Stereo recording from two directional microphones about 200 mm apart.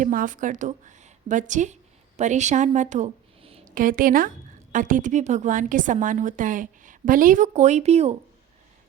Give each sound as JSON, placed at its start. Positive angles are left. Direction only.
{"t": 0.0, "sound": "a woman's voice", "side_deg": -40}
{"t": 3.8, "sound": "a woman's voice", "side_deg": -45}